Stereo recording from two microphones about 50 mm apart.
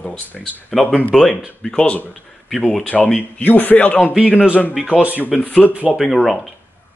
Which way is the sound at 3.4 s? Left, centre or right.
Left.